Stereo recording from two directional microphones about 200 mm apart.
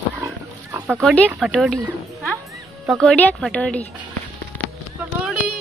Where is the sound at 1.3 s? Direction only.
Centre (ahead or behind).